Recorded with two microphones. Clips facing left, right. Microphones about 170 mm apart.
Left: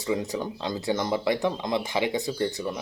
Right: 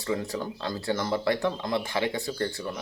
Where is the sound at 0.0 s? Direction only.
20° left (ahead or behind).